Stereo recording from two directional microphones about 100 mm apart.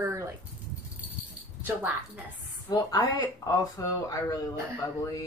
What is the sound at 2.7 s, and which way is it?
Speech, 40° left (ahead or behind).